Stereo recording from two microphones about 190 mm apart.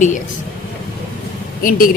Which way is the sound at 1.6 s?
45° left (ahead or behind).